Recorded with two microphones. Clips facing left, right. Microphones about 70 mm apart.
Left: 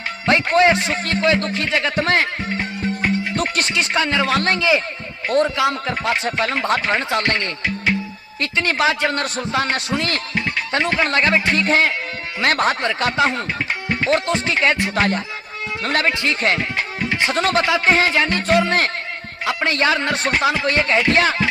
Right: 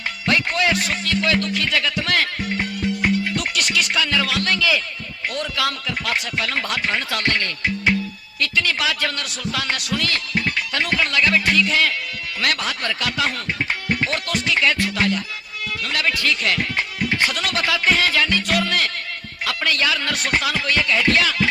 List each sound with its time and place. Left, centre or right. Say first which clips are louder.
0.3 s a man's voice: left 6 dB; left
3.3 s a man's voice: left 2 dB; left